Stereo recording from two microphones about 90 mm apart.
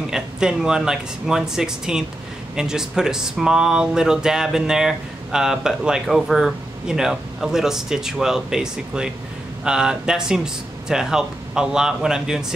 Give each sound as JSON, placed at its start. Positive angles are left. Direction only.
{"t": 0.1, "sound": "speech", "side_deg": -10}